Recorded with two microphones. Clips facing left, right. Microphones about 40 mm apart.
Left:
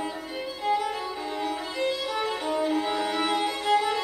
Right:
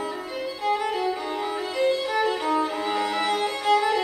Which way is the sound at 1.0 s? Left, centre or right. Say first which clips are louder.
Right 4 dB; right.